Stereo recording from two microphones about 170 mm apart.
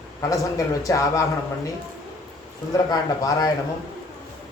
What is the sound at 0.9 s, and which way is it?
Speech, 20° left (ahead or behind).